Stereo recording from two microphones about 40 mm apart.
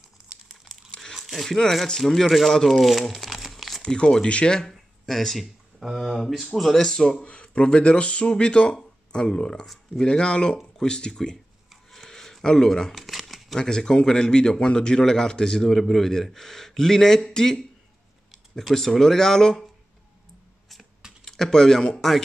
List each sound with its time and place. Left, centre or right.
1.1 s a sound: centre
2.0 s a man's voice: centre
3.3 s crumpling: centre
3.8 s speech: centre
4.6 s speech: centre
7.2 s speech: left; by 11.3 s centre
11.9 s a sound: centre
12.9 s crumpling: centre
13.6 s speech: centre
18.6 s speech: centre
21.2 s speech: centre